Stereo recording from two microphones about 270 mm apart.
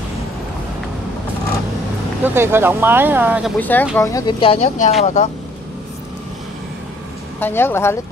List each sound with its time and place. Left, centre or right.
2.2 s speech: centre
3.5 s speech: centre; by 5.3 s left
7.3 s speech: centre